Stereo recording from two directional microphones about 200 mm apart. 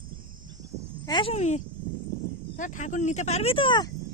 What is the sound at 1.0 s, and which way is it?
Speech, 25° left (ahead or behind).